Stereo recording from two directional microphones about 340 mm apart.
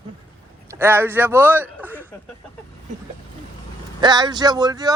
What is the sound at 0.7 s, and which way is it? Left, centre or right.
Speech, centre.